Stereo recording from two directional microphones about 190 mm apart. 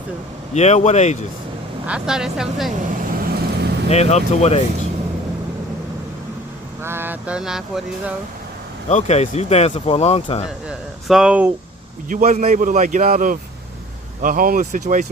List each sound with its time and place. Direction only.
0.5 s speech: 35° left (ahead or behind)
1.9 s speech: 5° right (ahead or behind)
3.1 s vehicle: 50° right (ahead or behind)
3.8 s speech: 35° left (ahead or behind)
6.8 s a sound: 10° right (ahead or behind)
8.9 s speech: 35° left (ahead or behind)
10.7 s speech: 5° right (ahead or behind)
12.0 s a man's voice: 40° right (ahead or behind)